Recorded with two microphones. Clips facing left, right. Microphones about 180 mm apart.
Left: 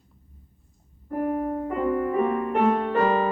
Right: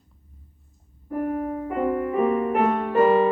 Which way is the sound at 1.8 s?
10° right (ahead or behind).